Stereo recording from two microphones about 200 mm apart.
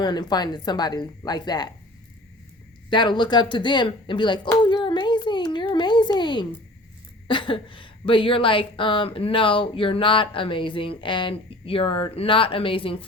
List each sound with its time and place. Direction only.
0.0 s a woman's voice: 20° left (ahead or behind)
2.9 s a woman's voice: 20° left (ahead or behind)